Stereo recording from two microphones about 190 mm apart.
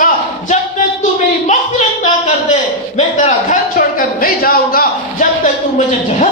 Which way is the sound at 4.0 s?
50° left (ahead or behind).